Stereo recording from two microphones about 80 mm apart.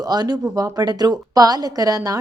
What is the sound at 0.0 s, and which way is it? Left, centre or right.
A woman's voice, right.